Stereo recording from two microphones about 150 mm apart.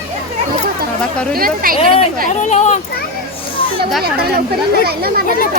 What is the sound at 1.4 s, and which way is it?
Speech, 75° right (ahead or behind).